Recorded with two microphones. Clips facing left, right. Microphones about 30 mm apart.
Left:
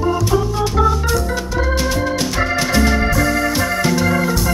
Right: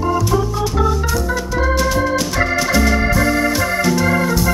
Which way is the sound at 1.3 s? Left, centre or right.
Centre.